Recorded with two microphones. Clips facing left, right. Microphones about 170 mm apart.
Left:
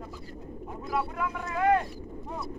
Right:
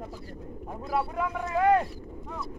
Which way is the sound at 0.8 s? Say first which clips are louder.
Right 2 dB; 35° right (ahead or behind).